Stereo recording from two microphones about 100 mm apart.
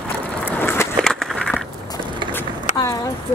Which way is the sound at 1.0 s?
5° left (ahead or behind).